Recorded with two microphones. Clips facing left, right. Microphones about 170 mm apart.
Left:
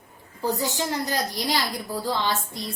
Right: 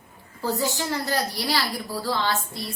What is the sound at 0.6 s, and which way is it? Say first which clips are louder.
A woman's voice: even; 20° left (ahead or behind).